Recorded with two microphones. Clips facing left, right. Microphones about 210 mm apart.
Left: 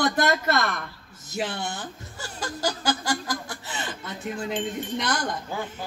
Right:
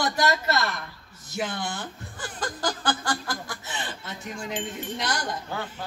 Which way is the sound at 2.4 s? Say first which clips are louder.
Left 1 dB; 10° left (ahead or behind).